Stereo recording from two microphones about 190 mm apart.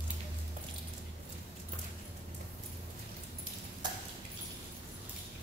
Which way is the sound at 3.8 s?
20° right (ahead or behind).